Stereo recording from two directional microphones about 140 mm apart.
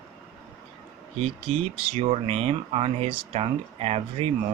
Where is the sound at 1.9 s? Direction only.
45° right (ahead or behind).